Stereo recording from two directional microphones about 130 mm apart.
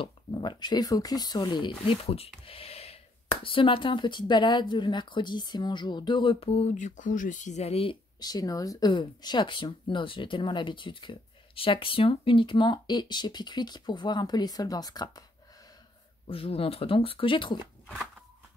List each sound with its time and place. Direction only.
0.0 s speech: 35° left (ahead or behind)
2.0 s speech: 50° left (ahead or behind)
8.2 s speech: 30° left (ahead or behind)
16.3 s speech: 45° left (ahead or behind)